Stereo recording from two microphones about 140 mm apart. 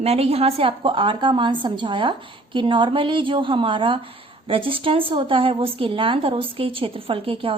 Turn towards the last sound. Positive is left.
turn(degrees=-40)  # may be behind; listen again after turning